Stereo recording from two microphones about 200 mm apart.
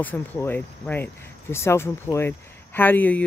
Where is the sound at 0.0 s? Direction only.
10° left (ahead or behind).